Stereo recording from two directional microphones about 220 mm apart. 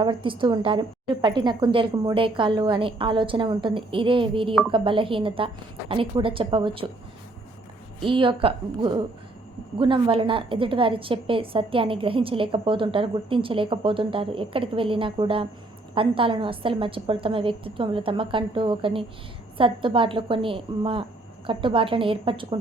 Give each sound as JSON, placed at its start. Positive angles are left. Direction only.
{"t": 0.0, "sound": "a woman's voice", "side_deg": -20}
{"t": 8.0, "sound": "a woman's voice", "side_deg": -25}